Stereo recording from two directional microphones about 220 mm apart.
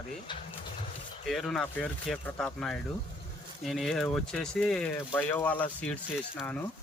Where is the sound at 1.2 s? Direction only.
Centre (ahead or behind).